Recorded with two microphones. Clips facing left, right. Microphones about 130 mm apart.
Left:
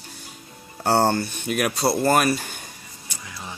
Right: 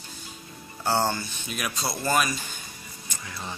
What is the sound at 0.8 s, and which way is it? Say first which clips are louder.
Speech: left 6 dB; 60° left (ahead or behind).